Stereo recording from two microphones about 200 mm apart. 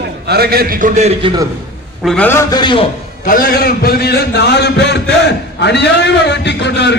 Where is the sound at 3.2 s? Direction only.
45° left (ahead or behind).